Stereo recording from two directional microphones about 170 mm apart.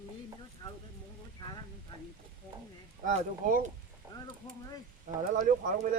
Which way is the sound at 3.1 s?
45° right (ahead or behind).